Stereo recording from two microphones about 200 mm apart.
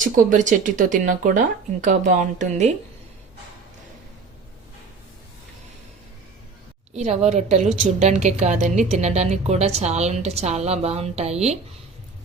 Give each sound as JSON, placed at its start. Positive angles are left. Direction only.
{"t": 0.0, "sound": "a woman's voice", "side_deg": -40}
{"t": 6.9, "sound": "a woman's voice", "side_deg": -35}